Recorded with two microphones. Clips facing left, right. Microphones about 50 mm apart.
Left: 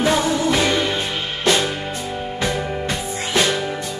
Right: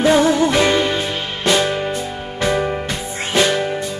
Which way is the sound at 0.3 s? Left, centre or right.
Right.